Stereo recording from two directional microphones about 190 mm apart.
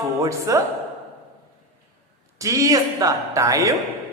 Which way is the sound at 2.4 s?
15° right (ahead or behind).